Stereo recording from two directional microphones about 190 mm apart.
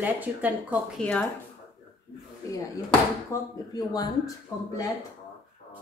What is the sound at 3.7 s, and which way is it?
Speech, 20° left (ahead or behind).